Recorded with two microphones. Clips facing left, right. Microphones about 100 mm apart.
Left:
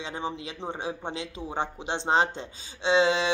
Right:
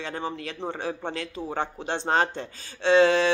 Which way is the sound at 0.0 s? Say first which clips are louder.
Right 1 dB; 15° left (ahead or behind).